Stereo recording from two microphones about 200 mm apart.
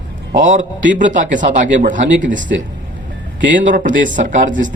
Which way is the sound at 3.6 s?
40° right (ahead or behind).